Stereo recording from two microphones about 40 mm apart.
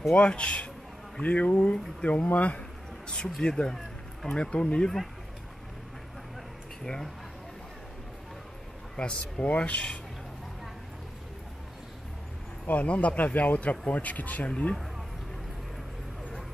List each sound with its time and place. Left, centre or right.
0.1 s speech: left
3.3 s speech: centre
3.7 s a sound: centre
4.4 s speech: left
6.8 s speech: centre
8.9 s speech: left
12.6 s speech: left